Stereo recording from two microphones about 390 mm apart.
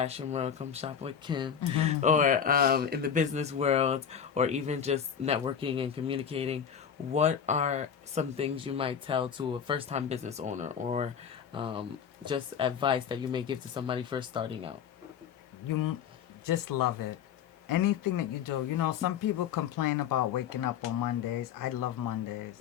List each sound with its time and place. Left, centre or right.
0.0 s speech: centre
16.5 s speech: left